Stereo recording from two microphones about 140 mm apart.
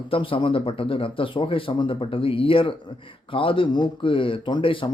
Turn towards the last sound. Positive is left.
turn(degrees=35)  # may be behind; listen again after turning